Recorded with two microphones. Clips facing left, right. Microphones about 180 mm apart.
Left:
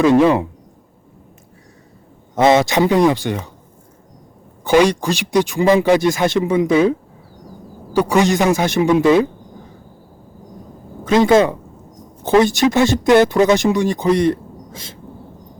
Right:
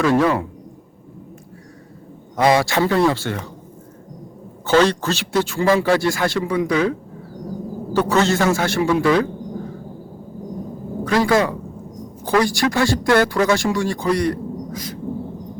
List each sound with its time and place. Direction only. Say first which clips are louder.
0.0 s speech: left 5 dB; 20° left (ahead or behind)
2.3 s a man's voice: left 3 dB; 25° left (ahead or behind)
4.6 s speech: left 2 dB; 15° left (ahead or behind)
7.9 s a man's voice: left 3 dB; 15° left (ahead or behind)
11.0 s speech: left 5 dB; 20° left (ahead or behind)